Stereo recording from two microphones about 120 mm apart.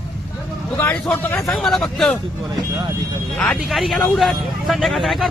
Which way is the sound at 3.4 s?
Centre (ahead or behind).